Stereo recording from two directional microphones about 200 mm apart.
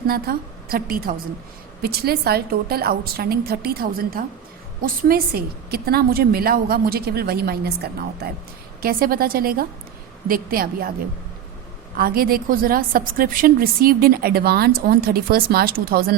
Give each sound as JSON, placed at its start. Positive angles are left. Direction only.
{"t": 0.1, "sound": "a woman's voice", "side_deg": -45}
{"t": 11.9, "sound": "a woman's voice", "side_deg": -50}